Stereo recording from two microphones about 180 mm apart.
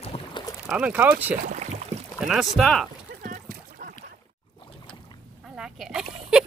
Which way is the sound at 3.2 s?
55° right (ahead or behind).